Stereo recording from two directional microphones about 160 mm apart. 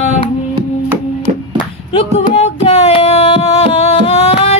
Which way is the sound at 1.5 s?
35° left (ahead or behind).